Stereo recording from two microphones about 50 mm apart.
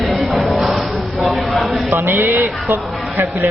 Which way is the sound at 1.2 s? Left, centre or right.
Centre.